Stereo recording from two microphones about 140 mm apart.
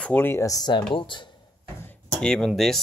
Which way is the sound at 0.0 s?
15° left (ahead or behind).